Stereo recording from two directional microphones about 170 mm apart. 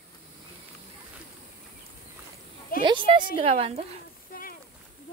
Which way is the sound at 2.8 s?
30° right (ahead or behind).